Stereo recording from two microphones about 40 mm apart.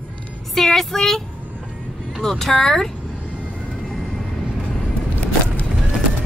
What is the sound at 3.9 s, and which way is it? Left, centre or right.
Vehicle, centre.